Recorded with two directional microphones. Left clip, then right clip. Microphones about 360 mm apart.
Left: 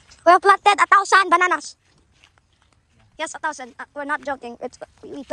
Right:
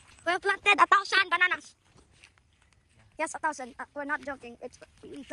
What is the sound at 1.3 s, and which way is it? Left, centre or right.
Speech, centre.